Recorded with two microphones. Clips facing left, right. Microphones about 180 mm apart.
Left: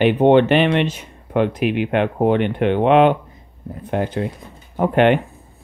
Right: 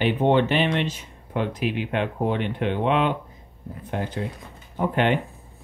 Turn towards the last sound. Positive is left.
turn(degrees=65)  # may be behind; listen again after turning